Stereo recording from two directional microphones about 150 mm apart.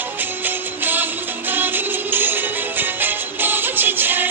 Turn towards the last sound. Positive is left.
turn(degrees=-15)  # may be behind; listen again after turning